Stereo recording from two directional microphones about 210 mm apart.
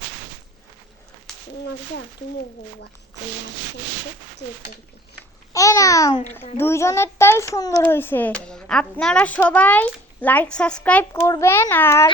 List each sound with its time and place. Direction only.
5.5 s a child's voice: 15° left (ahead or behind)